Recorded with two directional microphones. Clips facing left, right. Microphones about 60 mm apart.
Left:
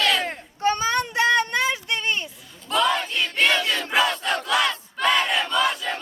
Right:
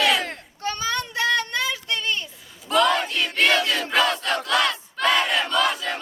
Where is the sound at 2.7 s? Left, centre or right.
Centre.